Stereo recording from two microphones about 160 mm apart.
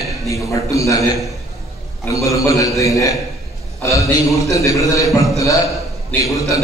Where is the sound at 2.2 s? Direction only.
20° left (ahead or behind).